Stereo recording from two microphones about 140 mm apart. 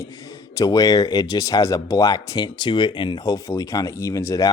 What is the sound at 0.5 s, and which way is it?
Speech, 25° left (ahead or behind).